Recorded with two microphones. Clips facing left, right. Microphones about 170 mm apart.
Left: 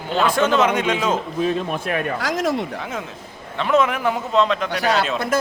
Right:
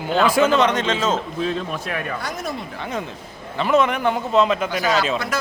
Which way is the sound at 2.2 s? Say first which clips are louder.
Left 7 dB; 90° left.